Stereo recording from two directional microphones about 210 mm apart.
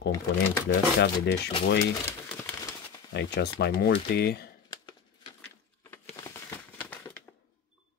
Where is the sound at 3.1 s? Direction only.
55° left (ahead or behind).